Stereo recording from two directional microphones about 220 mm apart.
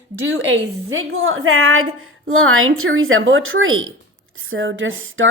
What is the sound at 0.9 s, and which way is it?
A woman's voice, 65° right (ahead or behind).